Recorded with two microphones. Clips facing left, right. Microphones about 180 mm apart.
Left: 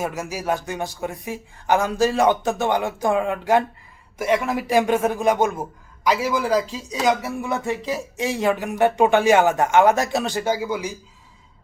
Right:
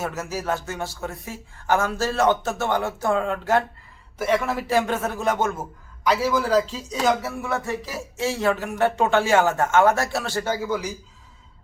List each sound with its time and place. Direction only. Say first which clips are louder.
0.0 s speech: left 2 dB; 10° left (ahead or behind)